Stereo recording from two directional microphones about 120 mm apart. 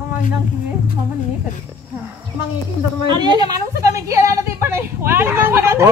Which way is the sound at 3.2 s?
35° right (ahead or behind).